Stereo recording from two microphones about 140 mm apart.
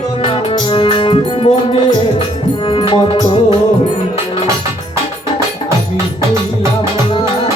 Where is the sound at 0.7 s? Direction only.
35° left (ahead or behind).